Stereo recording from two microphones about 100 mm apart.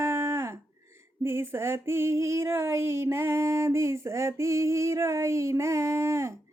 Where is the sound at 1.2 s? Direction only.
25° right (ahead or behind).